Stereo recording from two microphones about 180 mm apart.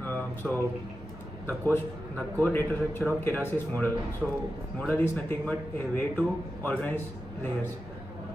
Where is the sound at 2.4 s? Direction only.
10° left (ahead or behind).